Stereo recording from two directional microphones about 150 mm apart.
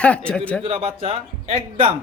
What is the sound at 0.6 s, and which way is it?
Speech, 40° right (ahead or behind).